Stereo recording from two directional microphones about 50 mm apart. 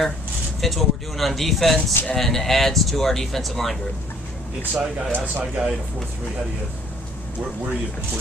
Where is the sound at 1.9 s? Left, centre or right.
Left.